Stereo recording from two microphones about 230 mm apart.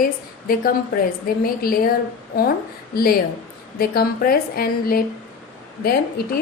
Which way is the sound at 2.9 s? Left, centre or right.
Left.